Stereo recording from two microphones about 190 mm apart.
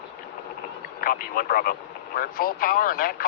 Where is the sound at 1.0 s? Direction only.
50° left (ahead or behind).